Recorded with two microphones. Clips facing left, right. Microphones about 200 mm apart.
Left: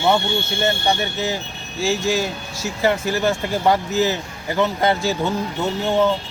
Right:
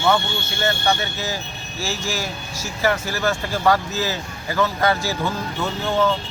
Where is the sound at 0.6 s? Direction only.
15° left (ahead or behind).